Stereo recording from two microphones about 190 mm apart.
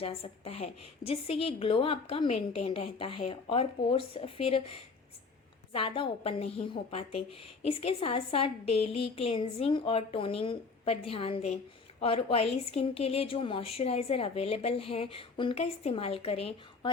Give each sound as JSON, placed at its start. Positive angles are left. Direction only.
{"t": 0.0, "sound": "a woman's voice", "side_deg": 30}